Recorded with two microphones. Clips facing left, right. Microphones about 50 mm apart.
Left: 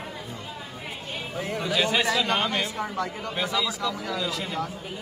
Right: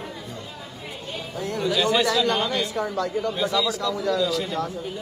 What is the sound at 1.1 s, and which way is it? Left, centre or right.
Speech, left.